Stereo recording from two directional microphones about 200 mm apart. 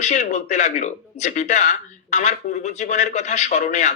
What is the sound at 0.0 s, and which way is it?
A man's voice, 35° left (ahead or behind).